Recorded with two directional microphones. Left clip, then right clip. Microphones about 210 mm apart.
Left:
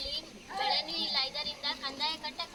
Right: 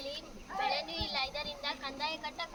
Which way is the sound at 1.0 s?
5° left (ahead or behind).